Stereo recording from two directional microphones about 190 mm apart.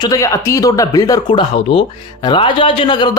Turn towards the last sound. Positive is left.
turn(degrees=25)  # may be behind; listen again after turning